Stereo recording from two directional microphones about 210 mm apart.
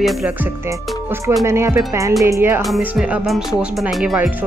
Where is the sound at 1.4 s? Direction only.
15° right (ahead or behind).